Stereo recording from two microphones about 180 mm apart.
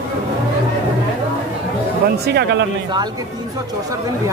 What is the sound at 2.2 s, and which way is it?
Speech, 65° right (ahead or behind).